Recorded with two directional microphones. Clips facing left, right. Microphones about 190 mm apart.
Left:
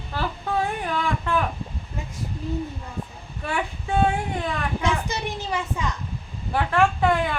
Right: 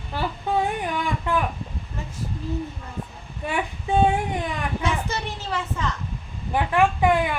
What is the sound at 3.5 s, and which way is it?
Speech, 20° right (ahead or behind).